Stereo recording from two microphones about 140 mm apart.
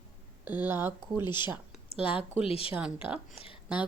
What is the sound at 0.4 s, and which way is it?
Speech, 15° right (ahead or behind).